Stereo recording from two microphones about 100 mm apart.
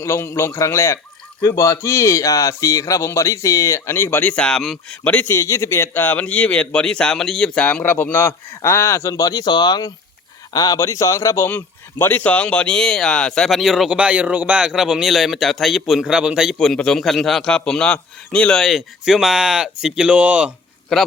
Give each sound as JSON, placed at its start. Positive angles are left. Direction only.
{"t": 0.0, "sound": "speech", "side_deg": 30}
{"t": 5.0, "sound": "speech", "side_deg": 20}
{"t": 11.4, "sound": "speech", "side_deg": 20}